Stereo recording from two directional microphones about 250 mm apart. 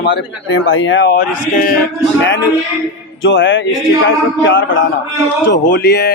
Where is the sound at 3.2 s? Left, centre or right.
Left.